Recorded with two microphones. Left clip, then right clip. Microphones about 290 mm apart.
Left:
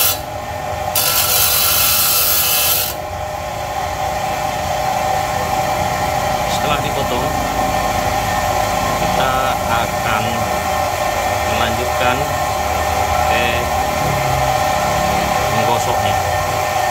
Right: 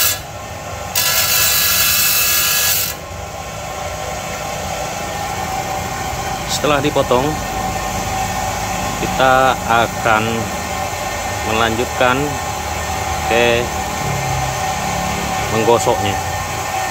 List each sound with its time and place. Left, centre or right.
9.2 s speech: centre
11.6 s speech: centre